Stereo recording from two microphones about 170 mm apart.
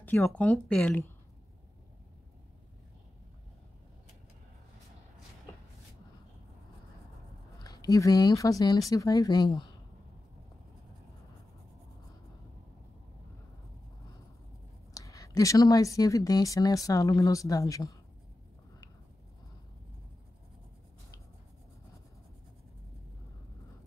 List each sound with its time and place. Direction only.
0.0 s speech: 10° left (ahead or behind)
7.6 s speech: 20° left (ahead or behind)
15.0 s speech: 20° left (ahead or behind)